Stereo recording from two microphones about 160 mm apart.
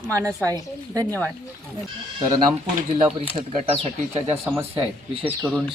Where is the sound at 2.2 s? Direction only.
25° right (ahead or behind).